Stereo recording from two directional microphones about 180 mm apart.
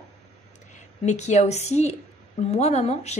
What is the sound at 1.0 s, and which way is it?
A woman's voice, 40° left (ahead or behind).